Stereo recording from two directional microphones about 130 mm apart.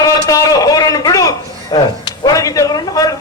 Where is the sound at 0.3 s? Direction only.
25° left (ahead or behind).